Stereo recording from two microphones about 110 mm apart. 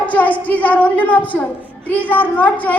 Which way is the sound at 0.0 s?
15° left (ahead or behind).